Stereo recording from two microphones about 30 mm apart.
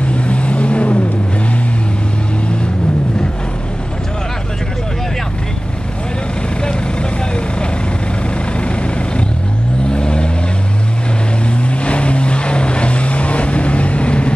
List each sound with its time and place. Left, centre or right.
0.0 s vehicle: left
6.6 s vehicle: left
9.8 s vehicle: left
11.8 s vehicle: left